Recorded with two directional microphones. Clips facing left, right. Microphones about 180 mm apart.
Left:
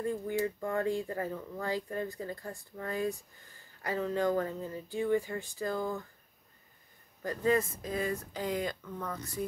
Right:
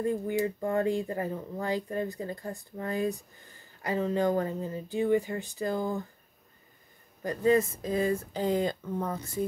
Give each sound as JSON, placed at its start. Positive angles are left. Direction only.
{"t": 0.0, "sound": "speech", "side_deg": -20}
{"t": 7.2, "sound": "speech", "side_deg": -25}